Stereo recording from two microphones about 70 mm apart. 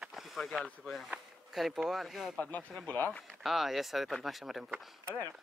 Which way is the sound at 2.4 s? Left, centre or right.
Left.